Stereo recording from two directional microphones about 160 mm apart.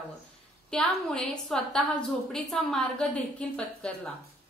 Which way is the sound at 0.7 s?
Centre (ahead or behind).